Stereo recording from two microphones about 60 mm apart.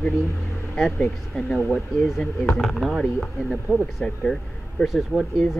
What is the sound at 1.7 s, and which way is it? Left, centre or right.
Speech, centre.